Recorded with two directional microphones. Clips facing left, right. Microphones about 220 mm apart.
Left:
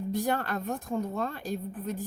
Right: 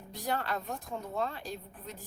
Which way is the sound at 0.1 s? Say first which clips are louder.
Left 4 dB; 50° left (ahead or behind).